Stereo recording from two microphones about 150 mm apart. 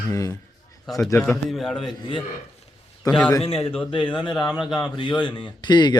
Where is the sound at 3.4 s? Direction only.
40° left (ahead or behind).